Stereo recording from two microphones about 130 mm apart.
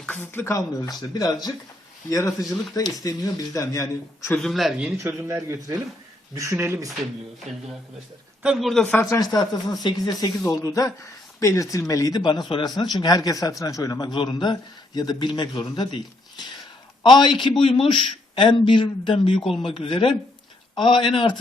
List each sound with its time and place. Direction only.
0.0 s speech: 15° left (ahead or behind)
4.4 s speech: centre (ahead or behind)
4.9 s speech: 20° right (ahead or behind)
8.4 s speech: centre (ahead or behind)
9.0 s speech: 25° left (ahead or behind)
17.0 s speech: 35° left (ahead or behind)